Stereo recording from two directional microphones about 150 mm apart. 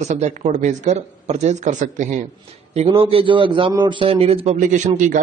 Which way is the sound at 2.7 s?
40° right (ahead or behind).